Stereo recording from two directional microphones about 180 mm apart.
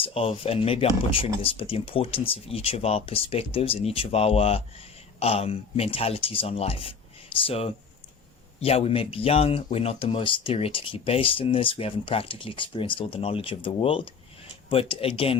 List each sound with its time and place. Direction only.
0.0 s speech: 30° left (ahead or behind)